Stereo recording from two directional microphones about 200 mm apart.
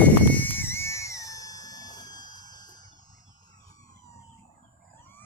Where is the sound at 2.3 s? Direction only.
20° left (ahead or behind).